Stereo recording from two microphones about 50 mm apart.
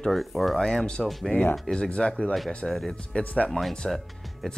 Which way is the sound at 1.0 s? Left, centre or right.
Centre.